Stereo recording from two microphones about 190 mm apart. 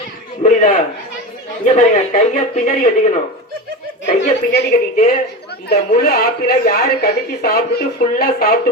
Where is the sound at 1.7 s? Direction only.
40° left (ahead or behind).